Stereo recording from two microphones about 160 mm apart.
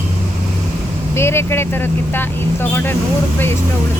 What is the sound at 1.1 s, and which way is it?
Speech, 15° left (ahead or behind).